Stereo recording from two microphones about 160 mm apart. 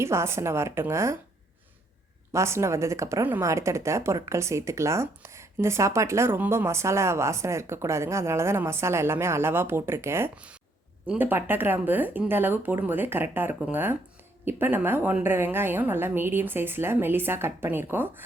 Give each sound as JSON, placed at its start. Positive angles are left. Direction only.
{"t": 0.0, "sound": "speech", "side_deg": -15}
{"t": 2.3, "sound": "speech", "side_deg": -20}